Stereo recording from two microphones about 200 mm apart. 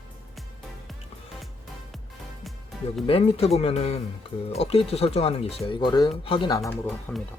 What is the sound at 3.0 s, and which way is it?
Speech, 30° left (ahead or behind).